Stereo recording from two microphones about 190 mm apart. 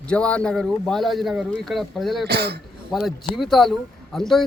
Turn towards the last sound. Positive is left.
turn(degrees=0)  # may be behind; listen again after turning